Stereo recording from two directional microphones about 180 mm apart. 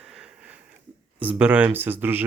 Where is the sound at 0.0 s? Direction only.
5° right (ahead or behind).